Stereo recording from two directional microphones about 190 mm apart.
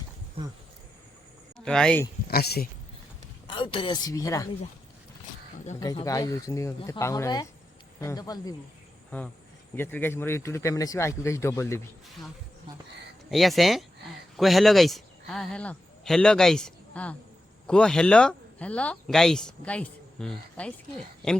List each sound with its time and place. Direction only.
1.5 s speech: 5° left (ahead or behind)
2.2 s speech: 55° left (ahead or behind)
3.4 s speech: 25° left (ahead or behind)
5.8 s speech: 20° left (ahead or behind)
9.0 s speech: 5° left (ahead or behind)
13.3 s speech: centre (ahead or behind)